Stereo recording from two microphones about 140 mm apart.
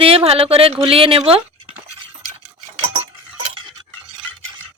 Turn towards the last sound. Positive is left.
turn(degrees=-35)  # may be behind; listen again after turning